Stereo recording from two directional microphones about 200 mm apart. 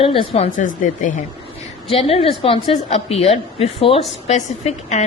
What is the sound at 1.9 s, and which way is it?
A woman's voice, 30° left (ahead or behind).